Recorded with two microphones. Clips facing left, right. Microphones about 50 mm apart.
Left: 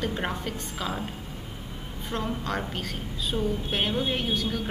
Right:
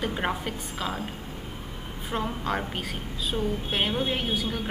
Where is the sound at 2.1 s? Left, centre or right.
Centre.